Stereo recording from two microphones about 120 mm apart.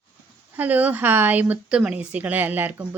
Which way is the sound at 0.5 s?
15° right (ahead or behind).